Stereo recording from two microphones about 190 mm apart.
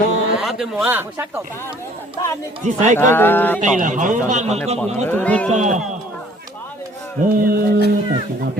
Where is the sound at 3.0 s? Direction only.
10° left (ahead or behind).